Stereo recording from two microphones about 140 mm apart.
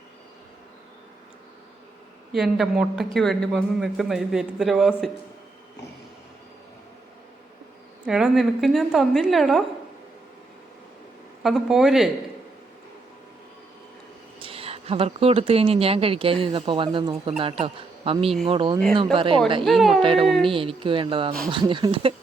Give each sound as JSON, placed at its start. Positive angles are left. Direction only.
{"t": 2.3, "sound": "a man's voice", "side_deg": 0}
{"t": 8.0, "sound": "a man's voice", "side_deg": -5}
{"t": 11.4, "sound": "a man's voice", "side_deg": 0}
{"t": 14.3, "sound": "a woman's voice", "side_deg": -40}
{"t": 19.6, "sound": "a man's voice", "side_deg": 0}
{"t": 20.0, "sound": "a man's voice", "side_deg": -40}
{"t": 20.2, "sound": "a man's voice", "side_deg": 0}
{"t": 20.5, "sound": "a man's voice", "side_deg": -40}